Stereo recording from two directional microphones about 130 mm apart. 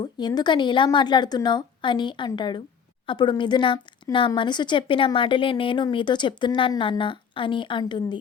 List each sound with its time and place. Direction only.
0.0 s speech: 35° left (ahead or behind)